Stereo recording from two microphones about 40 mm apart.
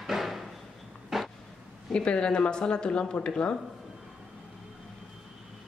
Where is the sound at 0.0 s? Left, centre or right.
Centre.